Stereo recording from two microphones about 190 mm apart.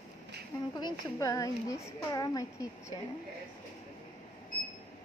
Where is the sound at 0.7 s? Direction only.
20° left (ahead or behind).